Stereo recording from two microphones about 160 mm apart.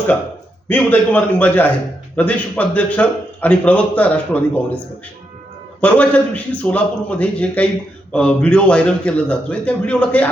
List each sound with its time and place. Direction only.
0.7 s a man's voice: 10° left (ahead or behind)
5.8 s a man's voice: 10° left (ahead or behind)